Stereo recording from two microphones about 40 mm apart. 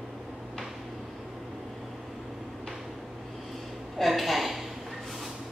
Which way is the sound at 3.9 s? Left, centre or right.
Centre.